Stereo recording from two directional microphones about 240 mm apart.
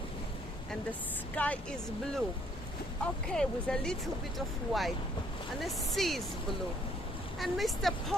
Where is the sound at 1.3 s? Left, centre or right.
Centre.